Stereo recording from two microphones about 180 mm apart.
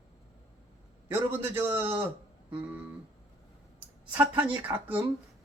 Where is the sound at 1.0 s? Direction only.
10° right (ahead or behind).